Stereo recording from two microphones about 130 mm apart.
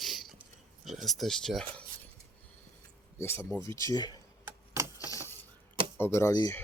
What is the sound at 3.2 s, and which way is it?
Speech, 20° left (ahead or behind).